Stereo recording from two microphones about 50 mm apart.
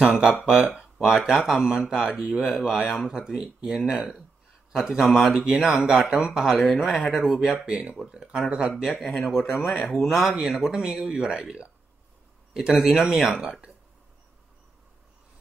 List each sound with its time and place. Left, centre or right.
0.0 s speech: centre
2.3 s speech: centre
2.6 s speech: centre
6.6 s speech: centre
9.0 s speech: centre
12.7 s speech: centre
13.3 s speech: centre